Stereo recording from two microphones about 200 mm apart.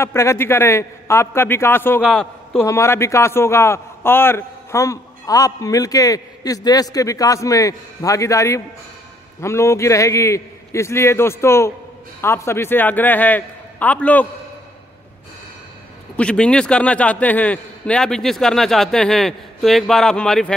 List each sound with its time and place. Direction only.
0.0 s a man's voice: 15° left (ahead or behind)
2.0 s a man's voice: centre (ahead or behind)
2.6 s a man's voice: 15° left (ahead or behind)
16.2 s a man's voice: 5° left (ahead or behind)